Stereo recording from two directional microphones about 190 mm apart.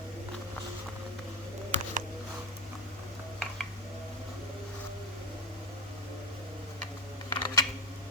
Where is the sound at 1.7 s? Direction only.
40° right (ahead or behind).